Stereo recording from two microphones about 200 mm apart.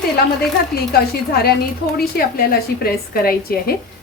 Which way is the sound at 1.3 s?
50° left (ahead or behind).